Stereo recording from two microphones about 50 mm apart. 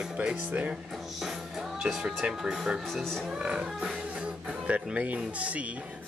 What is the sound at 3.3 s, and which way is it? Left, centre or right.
Speech, centre.